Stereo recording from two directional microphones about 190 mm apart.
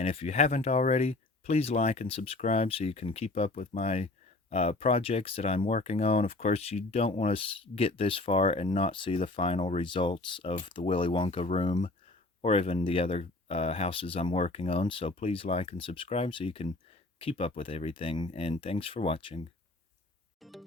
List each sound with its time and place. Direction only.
0.0 s speech: 30° left (ahead or behind)
20.4 s music: centre (ahead or behind)